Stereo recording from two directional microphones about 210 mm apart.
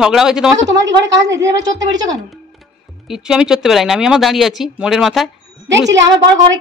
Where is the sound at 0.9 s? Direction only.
60° right (ahead or behind).